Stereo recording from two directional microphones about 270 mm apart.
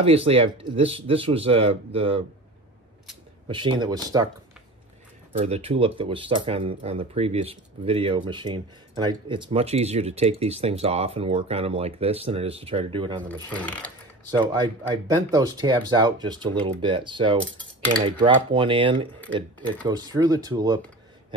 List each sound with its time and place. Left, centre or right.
0.0 s speech: right
3.4 s speech: centre
5.4 s speech: right
13.3 s speech: centre
14.3 s speech: centre